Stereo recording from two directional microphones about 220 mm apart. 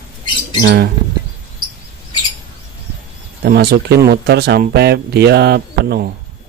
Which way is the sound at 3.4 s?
45° right (ahead or behind).